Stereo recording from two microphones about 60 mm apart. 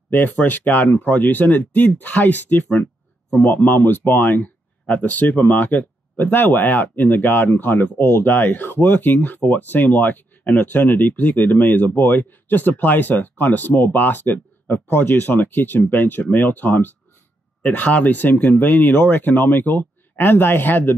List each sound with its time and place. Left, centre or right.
0.1 s speech: left